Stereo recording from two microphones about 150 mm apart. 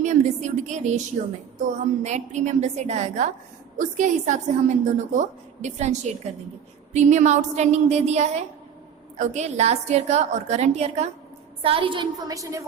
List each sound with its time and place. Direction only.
0.0 s a woman's voice: 50° right (ahead or behind); by 12.6 s 20° right (ahead or behind)